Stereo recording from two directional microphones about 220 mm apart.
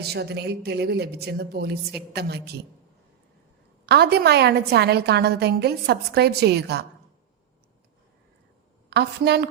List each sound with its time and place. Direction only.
0.0 s a woman's voice: 45° right (ahead or behind)
3.8 s a woman's voice: 45° right (ahead or behind)
8.9 s a woman's voice: 50° right (ahead or behind)